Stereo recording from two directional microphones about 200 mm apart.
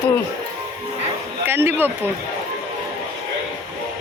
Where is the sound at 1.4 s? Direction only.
10° right (ahead or behind).